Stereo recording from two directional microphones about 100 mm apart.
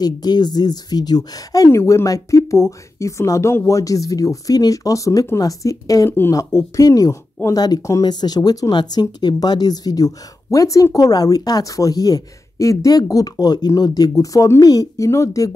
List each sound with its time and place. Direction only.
0.0 s speech: 45° left (ahead or behind)
1.7 s speech: 30° left (ahead or behind)
6.0 s speech: 25° left (ahead or behind)
6.3 s speech: 35° left (ahead or behind)